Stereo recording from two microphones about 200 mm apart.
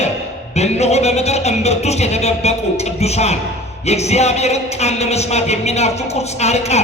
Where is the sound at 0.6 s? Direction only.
35° left (ahead or behind).